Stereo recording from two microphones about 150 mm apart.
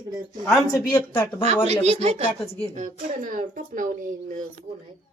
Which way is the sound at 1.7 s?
45° right (ahead or behind).